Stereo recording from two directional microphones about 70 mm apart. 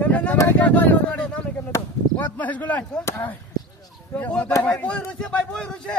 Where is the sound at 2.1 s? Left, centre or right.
Left.